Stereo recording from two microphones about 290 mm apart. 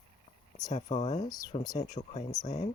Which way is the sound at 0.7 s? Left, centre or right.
Left.